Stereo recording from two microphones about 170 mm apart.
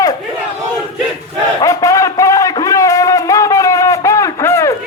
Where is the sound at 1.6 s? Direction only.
20° left (ahead or behind).